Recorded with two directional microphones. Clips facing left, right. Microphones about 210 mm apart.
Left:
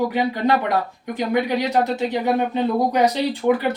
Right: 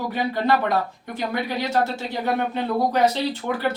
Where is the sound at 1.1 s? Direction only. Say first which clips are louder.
Left 6 dB; 15° left (ahead or behind).